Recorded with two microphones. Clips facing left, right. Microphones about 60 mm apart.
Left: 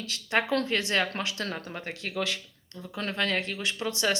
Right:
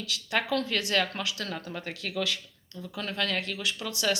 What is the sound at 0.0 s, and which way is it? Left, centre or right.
Speech, left.